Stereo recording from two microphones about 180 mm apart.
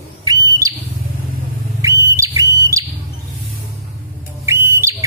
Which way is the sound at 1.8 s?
15° right (ahead or behind).